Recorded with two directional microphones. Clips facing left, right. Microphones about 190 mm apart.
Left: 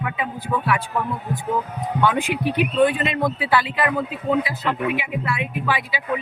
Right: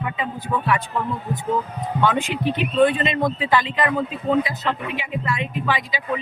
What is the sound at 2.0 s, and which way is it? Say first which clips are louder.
Speech: even; 15° left (ahead or behind).